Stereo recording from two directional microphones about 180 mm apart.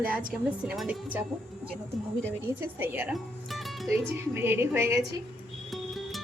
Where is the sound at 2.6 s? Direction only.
10° right (ahead or behind).